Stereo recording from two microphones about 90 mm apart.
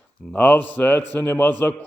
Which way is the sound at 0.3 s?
15° left (ahead or behind).